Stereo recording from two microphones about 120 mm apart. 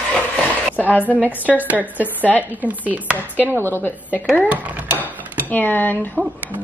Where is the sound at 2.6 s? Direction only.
15° right (ahead or behind).